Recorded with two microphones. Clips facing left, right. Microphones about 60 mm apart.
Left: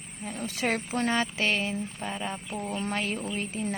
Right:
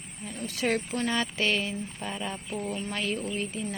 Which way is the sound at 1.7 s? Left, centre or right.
Left.